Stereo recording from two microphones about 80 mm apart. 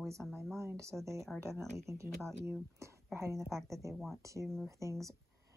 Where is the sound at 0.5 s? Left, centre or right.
Right.